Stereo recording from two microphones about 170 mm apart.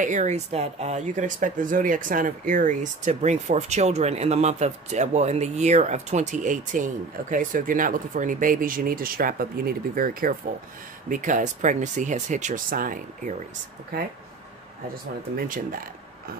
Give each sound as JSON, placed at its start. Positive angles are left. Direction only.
{"t": 0.0, "sound": "speech", "side_deg": -45}
{"t": 15.3, "sound": "speech", "side_deg": -55}